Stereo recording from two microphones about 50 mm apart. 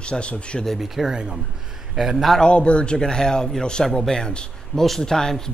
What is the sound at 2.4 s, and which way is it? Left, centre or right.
Speech, left.